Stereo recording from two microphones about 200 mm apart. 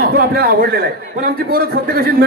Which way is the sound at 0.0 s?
50° right (ahead or behind).